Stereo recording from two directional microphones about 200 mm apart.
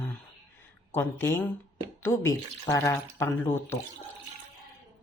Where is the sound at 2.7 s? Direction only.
15° left (ahead or behind).